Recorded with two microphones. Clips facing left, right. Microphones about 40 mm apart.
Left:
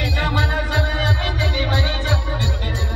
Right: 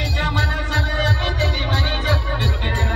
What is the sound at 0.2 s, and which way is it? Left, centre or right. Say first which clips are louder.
Music: even; centre.